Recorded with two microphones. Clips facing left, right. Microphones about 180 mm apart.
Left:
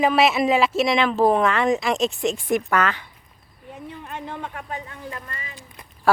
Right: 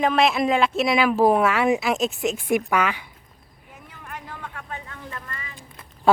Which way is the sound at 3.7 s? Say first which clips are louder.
Left 5 dB; 25° left (ahead or behind).